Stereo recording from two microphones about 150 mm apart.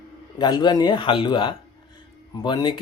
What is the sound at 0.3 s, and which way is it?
Speech, 30° left (ahead or behind).